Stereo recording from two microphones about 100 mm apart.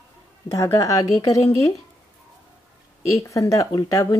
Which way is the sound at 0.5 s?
35° left (ahead or behind).